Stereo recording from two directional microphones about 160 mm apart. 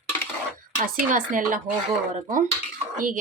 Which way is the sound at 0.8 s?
55° right (ahead or behind).